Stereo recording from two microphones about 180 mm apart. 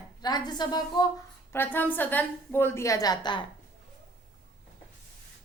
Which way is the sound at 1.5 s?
10° left (ahead or behind).